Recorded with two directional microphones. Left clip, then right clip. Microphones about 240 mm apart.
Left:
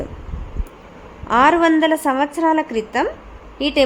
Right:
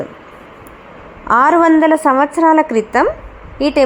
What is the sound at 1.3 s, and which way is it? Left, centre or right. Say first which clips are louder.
A woman's voice: right 4 dB; centre.